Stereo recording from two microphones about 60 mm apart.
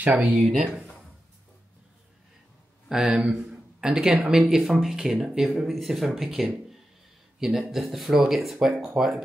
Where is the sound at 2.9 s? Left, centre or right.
Centre.